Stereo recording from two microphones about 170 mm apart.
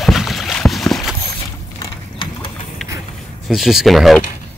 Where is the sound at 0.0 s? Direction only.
Centre (ahead or behind).